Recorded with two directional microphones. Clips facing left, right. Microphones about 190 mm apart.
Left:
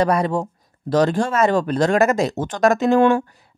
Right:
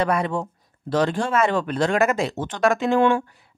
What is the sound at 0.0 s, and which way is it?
Speech, 40° left (ahead or behind).